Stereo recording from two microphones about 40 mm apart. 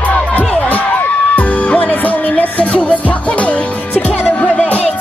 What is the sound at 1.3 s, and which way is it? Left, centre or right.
Music, left.